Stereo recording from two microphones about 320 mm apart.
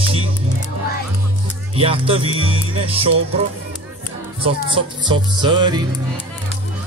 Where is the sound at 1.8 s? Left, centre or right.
Centre.